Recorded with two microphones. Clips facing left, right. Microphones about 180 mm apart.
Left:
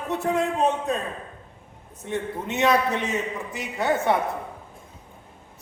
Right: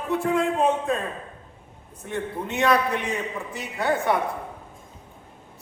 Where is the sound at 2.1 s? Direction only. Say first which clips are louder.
Left 1 dB; 20° left (ahead or behind).